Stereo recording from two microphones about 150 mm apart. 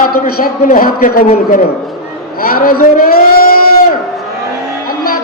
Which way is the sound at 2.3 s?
85° left.